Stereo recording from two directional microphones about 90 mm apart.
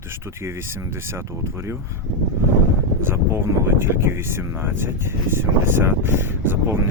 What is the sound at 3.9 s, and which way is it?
Speech, 25° right (ahead or behind).